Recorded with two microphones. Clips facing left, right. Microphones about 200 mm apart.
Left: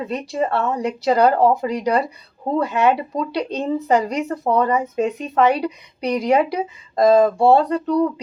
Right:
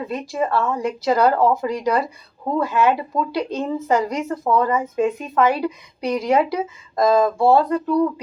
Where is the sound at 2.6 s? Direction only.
20° left (ahead or behind).